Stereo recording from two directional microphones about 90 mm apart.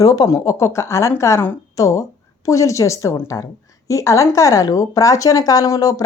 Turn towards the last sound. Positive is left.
turn(degrees=45)  # may be behind; listen again after turning